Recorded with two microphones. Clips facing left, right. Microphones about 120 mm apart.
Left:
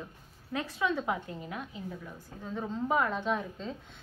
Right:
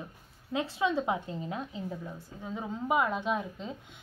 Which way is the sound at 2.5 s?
10° right (ahead or behind).